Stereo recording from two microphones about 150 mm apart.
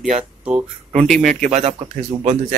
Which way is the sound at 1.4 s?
50° right (ahead or behind).